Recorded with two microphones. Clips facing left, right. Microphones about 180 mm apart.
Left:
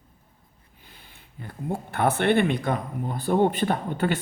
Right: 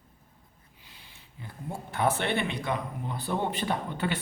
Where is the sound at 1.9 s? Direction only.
60° left (ahead or behind).